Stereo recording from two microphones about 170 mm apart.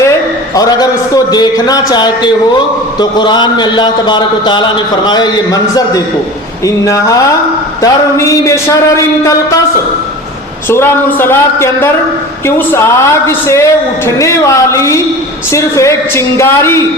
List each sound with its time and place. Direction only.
0.5 s a man's voice: 20° left (ahead or behind)
10.7 s a man's voice: 15° left (ahead or behind)